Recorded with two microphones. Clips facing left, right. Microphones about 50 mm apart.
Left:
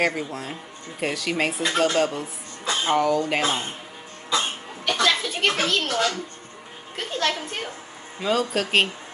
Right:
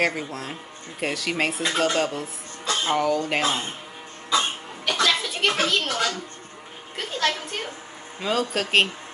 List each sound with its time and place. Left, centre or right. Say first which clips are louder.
0.0 s speech: left 1 dB; centre
2.6 s music: left 1 dB; centre
3.0 s speech: left 1 dB; centre
4.8 s a sound: left 1 dB; centre
7.0 s speech: even; centre